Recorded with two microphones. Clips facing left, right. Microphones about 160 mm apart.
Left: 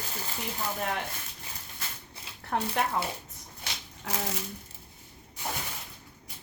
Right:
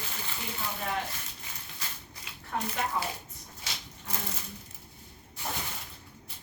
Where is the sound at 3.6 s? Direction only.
80° left.